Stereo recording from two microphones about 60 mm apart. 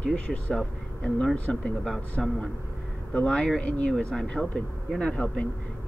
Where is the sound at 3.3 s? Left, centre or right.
Centre.